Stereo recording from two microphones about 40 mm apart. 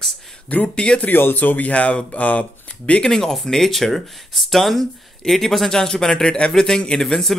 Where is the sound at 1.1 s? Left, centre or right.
Left.